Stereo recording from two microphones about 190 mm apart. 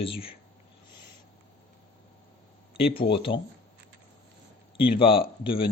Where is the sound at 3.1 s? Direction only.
25° left (ahead or behind).